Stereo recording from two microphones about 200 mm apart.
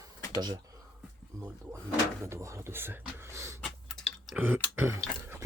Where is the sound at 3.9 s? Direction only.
Centre (ahead or behind).